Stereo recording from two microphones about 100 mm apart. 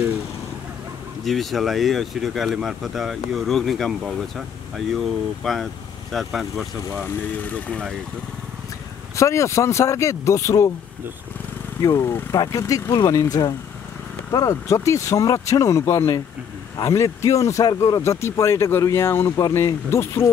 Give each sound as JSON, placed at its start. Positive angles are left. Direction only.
{"t": 1.2, "sound": "speech", "side_deg": 0}
{"t": 7.0, "sound": "speech", "side_deg": 20}
{"t": 9.1, "sound": "speech", "side_deg": 30}
{"t": 11.8, "sound": "speech", "side_deg": 30}